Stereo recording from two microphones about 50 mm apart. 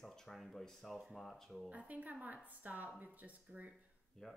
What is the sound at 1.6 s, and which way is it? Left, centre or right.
A woman's voice, right.